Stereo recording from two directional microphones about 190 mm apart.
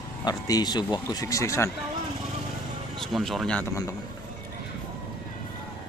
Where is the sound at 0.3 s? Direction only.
20° left (ahead or behind).